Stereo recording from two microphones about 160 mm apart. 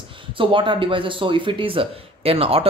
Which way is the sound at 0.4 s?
30° right (ahead or behind).